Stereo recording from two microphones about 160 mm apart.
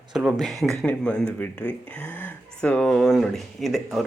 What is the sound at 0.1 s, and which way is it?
A man's voice, 5° right (ahead or behind).